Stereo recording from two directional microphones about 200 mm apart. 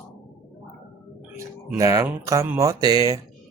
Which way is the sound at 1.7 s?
15° right (ahead or behind).